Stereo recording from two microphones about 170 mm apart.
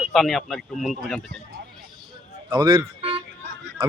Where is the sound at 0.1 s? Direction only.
Centre (ahead or behind).